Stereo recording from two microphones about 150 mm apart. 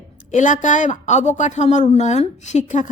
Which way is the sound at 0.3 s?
55° left (ahead or behind).